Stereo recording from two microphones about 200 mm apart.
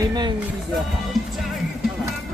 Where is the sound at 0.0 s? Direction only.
20° right (ahead or behind).